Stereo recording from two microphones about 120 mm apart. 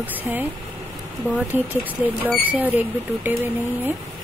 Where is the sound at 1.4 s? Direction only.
15° right (ahead or behind).